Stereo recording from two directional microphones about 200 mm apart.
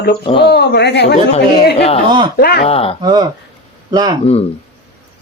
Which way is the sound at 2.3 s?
50° left (ahead or behind).